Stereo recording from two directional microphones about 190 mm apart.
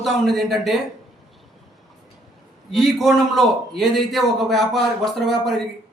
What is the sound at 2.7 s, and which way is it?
A man's voice, centre (ahead or behind).